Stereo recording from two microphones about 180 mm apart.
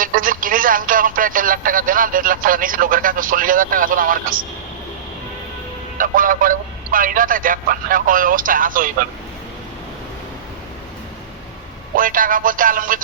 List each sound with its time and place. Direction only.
0.0 s a sound: 50° right (ahead or behind)
6.0 s speech: 50° right (ahead or behind)
11.9 s music: 50° right (ahead or behind)